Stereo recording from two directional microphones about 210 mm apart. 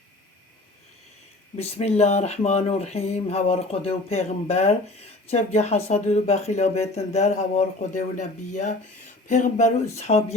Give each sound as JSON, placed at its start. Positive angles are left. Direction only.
{"t": 1.5, "sound": "speech", "side_deg": 30}